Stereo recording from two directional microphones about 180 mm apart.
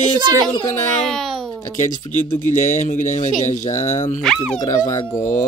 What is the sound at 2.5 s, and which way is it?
Speech, 45° left (ahead or behind).